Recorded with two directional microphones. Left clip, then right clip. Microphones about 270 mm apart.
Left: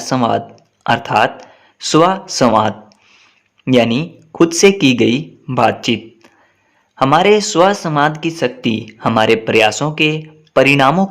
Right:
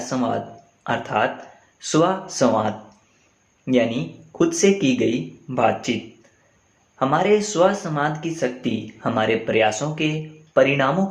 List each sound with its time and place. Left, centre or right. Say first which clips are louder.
0.0 s speech: left 8 dB; left
6.9 s speech: left 8 dB; left